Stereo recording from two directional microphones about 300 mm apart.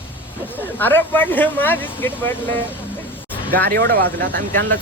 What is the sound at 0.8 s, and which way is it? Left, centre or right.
Speech, centre.